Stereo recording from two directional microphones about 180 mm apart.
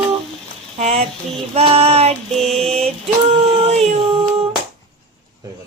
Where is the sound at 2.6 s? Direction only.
35° right (ahead or behind).